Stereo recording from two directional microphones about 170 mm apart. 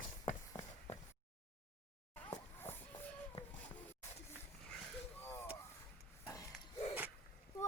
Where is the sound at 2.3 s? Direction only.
15° left (ahead or behind).